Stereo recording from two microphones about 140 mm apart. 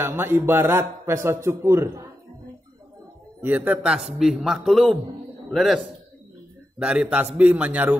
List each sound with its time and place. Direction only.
0.0 s a man's voice: 15° right (ahead or behind)
3.4 s a man's voice: 10° right (ahead or behind)
6.8 s a man's voice: 5° right (ahead or behind)